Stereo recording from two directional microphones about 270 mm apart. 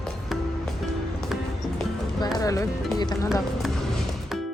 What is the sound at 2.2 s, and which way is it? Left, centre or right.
Speech, centre.